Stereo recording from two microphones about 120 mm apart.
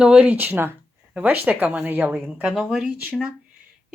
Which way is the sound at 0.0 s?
10° right (ahead or behind).